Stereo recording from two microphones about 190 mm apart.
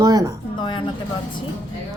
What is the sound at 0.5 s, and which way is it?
Speech, 25° left (ahead or behind).